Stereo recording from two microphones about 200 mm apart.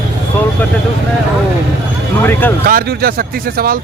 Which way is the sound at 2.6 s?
50° right (ahead or behind).